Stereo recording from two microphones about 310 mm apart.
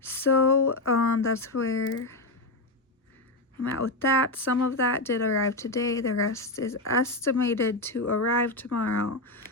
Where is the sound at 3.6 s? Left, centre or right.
Left.